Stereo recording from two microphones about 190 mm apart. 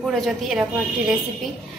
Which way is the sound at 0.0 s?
Centre (ahead or behind).